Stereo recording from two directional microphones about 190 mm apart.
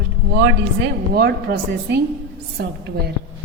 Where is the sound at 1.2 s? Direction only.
55° right (ahead or behind).